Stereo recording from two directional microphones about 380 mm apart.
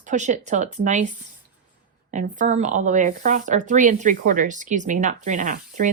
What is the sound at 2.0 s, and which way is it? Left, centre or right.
Speech, centre.